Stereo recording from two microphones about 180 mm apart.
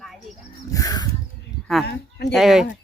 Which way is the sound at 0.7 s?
20° left (ahead or behind).